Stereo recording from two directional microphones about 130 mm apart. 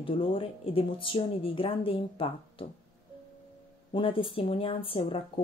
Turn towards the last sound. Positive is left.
turn(degrees=45)  # may be behind; listen again after turning